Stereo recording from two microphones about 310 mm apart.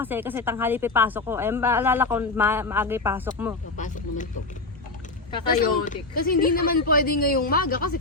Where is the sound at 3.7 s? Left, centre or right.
Left.